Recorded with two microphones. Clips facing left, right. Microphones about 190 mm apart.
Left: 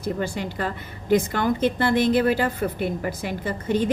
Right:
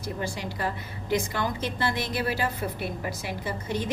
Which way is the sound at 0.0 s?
55° left (ahead or behind).